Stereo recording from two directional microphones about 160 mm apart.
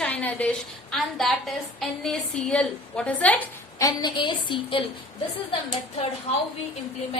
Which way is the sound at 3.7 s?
25° left (ahead or behind).